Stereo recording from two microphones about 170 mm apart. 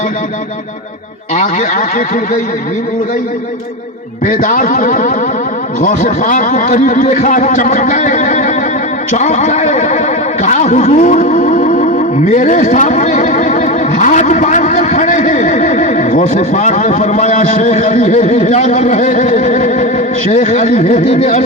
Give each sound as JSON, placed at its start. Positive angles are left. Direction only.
{"t": 1.4, "sound": "a man's voice", "side_deg": 45}
{"t": 4.3, "sound": "a man's voice", "side_deg": 50}
{"t": 10.4, "sound": "a sound", "side_deg": 45}
{"t": 20.3, "sound": "a man's voice", "side_deg": 40}